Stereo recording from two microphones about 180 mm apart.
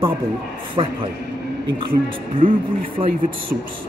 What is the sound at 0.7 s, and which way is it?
Speech, 30° right (ahead or behind).